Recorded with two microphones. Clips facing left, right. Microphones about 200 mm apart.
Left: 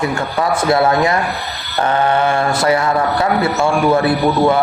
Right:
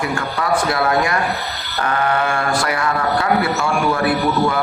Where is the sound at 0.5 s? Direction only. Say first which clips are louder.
Left 3 dB; 25° left (ahead or behind).